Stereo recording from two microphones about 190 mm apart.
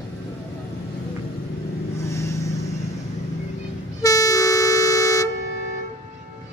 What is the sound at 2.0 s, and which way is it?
Vehicle, 15° left (ahead or behind).